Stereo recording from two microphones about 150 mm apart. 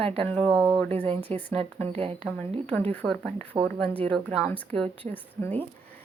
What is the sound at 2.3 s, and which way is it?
A woman's voice, 15° left (ahead or behind).